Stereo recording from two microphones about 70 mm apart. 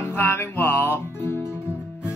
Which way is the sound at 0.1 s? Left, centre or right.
Left.